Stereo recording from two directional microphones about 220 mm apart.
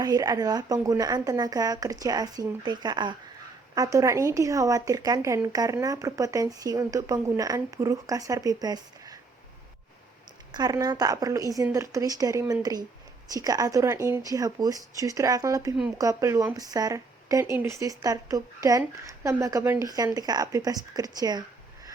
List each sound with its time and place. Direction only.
0.0 s speech: 15° right (ahead or behind)
10.5 s speech: 15° right (ahead or behind)